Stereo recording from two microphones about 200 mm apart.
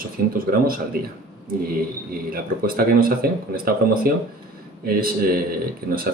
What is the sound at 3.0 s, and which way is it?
Speech, 45° right (ahead or behind).